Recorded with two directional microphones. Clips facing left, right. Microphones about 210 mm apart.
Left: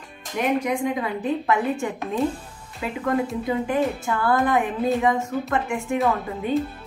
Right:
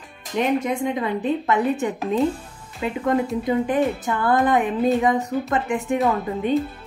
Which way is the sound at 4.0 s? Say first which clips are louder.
Right 2 dB; 20° right (ahead or behind).